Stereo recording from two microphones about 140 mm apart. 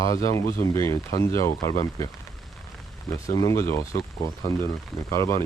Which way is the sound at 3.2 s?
25° left (ahead or behind).